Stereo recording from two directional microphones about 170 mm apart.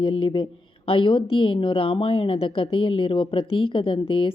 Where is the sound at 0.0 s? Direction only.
30° left (ahead or behind).